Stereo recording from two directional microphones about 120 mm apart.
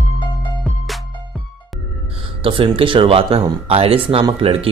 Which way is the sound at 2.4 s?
50° right (ahead or behind).